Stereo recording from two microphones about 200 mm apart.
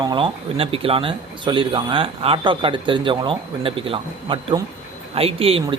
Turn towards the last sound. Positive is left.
turn(degrees=-30)  # may be behind; listen again after turning